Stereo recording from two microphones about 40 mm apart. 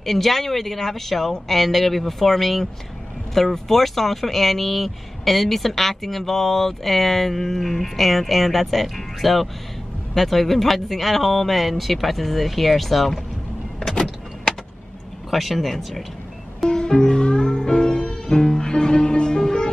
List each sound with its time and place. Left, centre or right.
0.0 s speech: centre
15.3 s speech: centre
16.6 s music: centre